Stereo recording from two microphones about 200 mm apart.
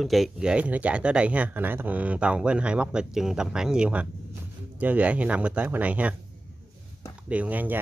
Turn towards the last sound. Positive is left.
turn(degrees=-10)  # may be behind; listen again after turning